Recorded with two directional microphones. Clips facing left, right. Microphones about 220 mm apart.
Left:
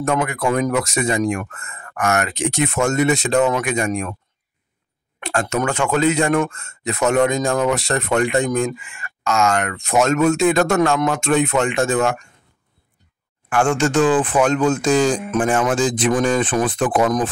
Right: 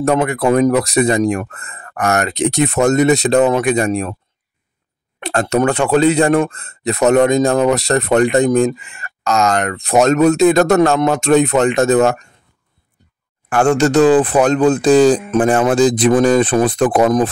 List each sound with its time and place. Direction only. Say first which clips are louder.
0.0 s speech: right 5 dB; 35° right (ahead or behind)
5.2 s speech: right 6 dB; 35° right (ahead or behind)
13.5 s speech: right 5 dB; 40° right (ahead or behind)